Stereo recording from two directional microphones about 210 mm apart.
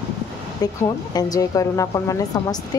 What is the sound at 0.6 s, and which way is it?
A woman's voice, 15° left (ahead or behind).